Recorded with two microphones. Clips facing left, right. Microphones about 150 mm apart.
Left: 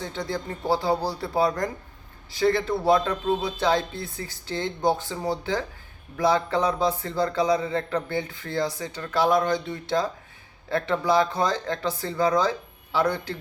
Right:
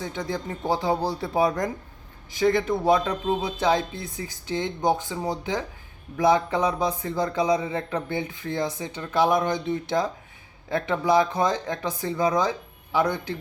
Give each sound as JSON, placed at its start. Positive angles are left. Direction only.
{"t": 0.0, "sound": "a man's voice", "side_deg": -15}